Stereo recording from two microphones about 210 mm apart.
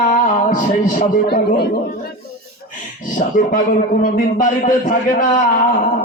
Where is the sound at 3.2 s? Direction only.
40° left (ahead or behind).